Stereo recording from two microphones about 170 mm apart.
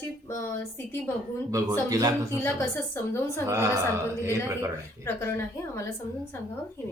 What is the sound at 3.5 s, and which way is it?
Speech, 15° right (ahead or behind).